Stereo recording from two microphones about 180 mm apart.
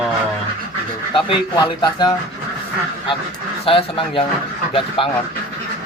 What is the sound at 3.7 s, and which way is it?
Speech, 30° left (ahead or behind).